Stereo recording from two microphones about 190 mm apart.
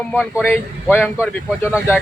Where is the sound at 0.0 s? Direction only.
10° left (ahead or behind).